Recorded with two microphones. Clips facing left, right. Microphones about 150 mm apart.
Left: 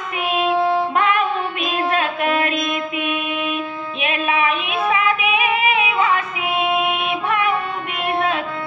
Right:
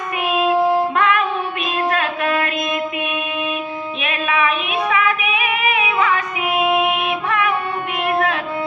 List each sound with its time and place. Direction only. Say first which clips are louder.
0.6 s music: right 2 dB; 15° right (ahead or behind)
0.9 s music: right 1 dB; 25° left (ahead or behind)
1.9 s a sound: even; 30° left (ahead or behind)
4.1 s female singing: even; 25° left (ahead or behind)